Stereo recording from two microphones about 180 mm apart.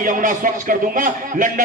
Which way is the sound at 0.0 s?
45° right (ahead or behind).